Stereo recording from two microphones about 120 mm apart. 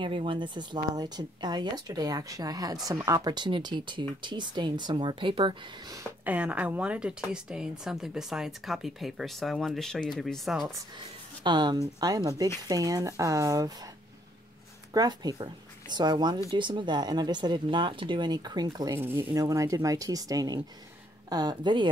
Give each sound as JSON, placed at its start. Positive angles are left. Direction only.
{"t": 0.0, "sound": "speech", "side_deg": -45}
{"t": 6.2, "sound": "speech", "side_deg": -10}
{"t": 11.4, "sound": "speech", "side_deg": -40}
{"t": 15.0, "sound": "speech", "side_deg": -35}
{"t": 18.9, "sound": "speech", "side_deg": -20}
{"t": 19.3, "sound": "speech", "side_deg": -30}